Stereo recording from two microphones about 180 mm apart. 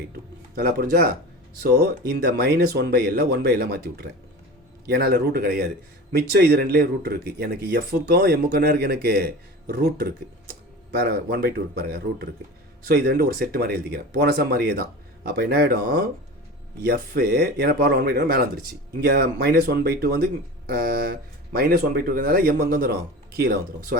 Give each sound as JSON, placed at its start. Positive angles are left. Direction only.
{"t": 0.1, "sound": "a man's voice", "side_deg": -55}